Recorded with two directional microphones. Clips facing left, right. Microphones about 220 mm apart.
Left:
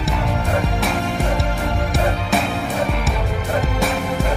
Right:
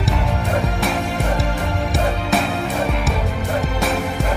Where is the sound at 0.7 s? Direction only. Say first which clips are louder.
Even; centre (ahead or behind).